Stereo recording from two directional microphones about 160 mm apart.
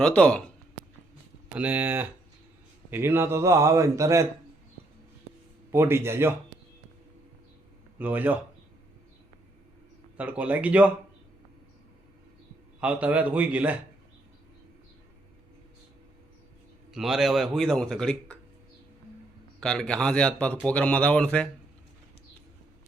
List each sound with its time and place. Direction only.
0.0 s speech: 5° left (ahead or behind)
1.5 s a man's voice: 10° right (ahead or behind)
5.7 s a man's voice: 15° right (ahead or behind)
7.9 s a man's voice: 10° right (ahead or behind)
10.2 s a man's voice: 10° right (ahead or behind)
12.8 s a man's voice: 10° right (ahead or behind)
16.9 s a man's voice: 5° right (ahead or behind)
19.5 s a man's voice: 5° left (ahead or behind)